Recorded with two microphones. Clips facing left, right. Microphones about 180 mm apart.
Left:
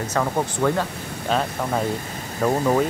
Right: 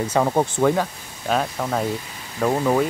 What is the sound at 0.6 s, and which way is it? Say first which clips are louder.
Speech: right 2 dB; 5° right (ahead or behind).